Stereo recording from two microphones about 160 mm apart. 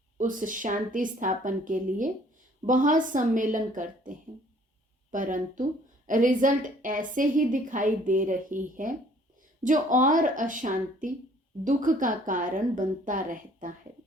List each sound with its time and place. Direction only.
0.2 s a woman's voice: 55° right (ahead or behind)
5.1 s a woman's voice: 55° right (ahead or behind)